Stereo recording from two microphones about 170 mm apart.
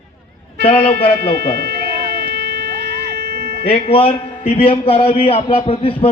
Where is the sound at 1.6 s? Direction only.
75° right (ahead or behind).